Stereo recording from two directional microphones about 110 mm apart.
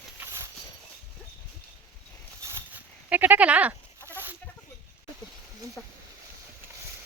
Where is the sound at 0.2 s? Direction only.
25° right (ahead or behind).